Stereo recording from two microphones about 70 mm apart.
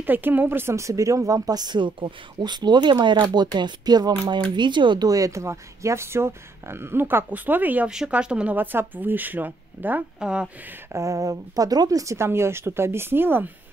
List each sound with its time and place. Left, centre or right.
0.0 s speech: right
2.4 s speech: right
8.1 s speech: centre
8.5 s speech: right
10.2 s speech: centre
10.9 s speech: right
12.3 s speech: right